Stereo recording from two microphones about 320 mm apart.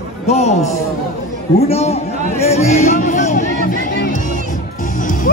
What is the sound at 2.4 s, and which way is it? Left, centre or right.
Music, centre.